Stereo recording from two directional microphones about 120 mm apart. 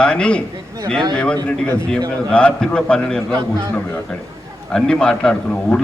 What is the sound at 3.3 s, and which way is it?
Speech, 35° right (ahead or behind).